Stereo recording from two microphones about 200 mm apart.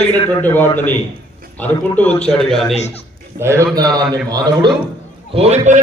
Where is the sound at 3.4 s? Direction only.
15° right (ahead or behind).